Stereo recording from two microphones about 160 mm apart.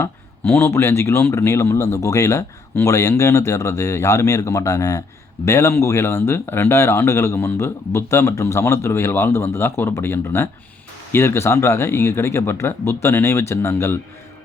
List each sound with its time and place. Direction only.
0.0 s speech: 15° left (ahead or behind)